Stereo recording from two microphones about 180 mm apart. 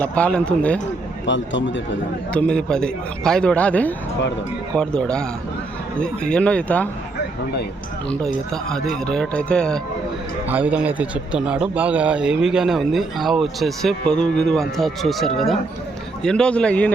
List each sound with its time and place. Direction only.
0.0 s speech: 5° left (ahead or behind)
1.3 s a man's voice: 90° left
2.3 s speech: 5° left (ahead or behind)
8.9 s speech: 5° left (ahead or behind)
10.5 s speech: 10° right (ahead or behind)